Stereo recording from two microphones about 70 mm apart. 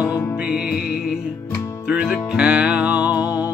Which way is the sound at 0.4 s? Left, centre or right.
Centre.